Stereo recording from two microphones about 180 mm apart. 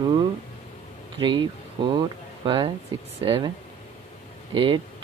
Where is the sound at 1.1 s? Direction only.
25° right (ahead or behind).